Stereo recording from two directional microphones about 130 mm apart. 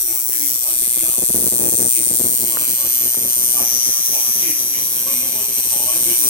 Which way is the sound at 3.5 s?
15° left (ahead or behind).